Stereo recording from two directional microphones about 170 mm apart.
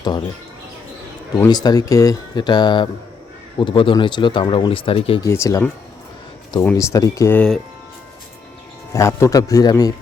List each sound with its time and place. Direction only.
1.4 s speech: 25° left (ahead or behind)
5.2 s speech: 20° left (ahead or behind)
8.9 s speech: 15° left (ahead or behind)